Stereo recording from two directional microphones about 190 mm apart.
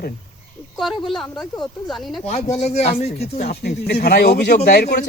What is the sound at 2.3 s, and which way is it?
Speech, 30° left (ahead or behind).